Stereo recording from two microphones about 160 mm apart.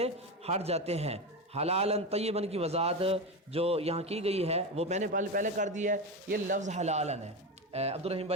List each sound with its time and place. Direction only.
0.0 s a man's voice: 40° right (ahead or behind)